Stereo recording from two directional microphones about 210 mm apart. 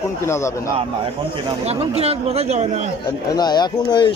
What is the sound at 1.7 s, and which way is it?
Speech, 30° right (ahead or behind).